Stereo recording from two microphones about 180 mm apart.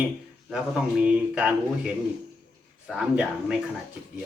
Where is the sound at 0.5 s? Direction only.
5° right (ahead or behind).